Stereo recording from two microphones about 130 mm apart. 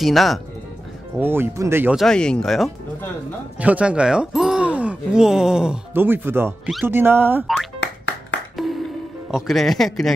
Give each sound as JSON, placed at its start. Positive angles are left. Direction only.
{"t": 0.0, "sound": "a man's voice", "side_deg": 0}
{"t": 1.1, "sound": "speech", "side_deg": -15}
{"t": 2.0, "sound": "a man's voice", "side_deg": 5}
{"t": 3.5, "sound": "speech", "side_deg": -10}
{"t": 5.9, "sound": "speech", "side_deg": -15}
{"t": 8.6, "sound": "music", "side_deg": 0}
{"t": 9.3, "sound": "a man's voice", "side_deg": 0}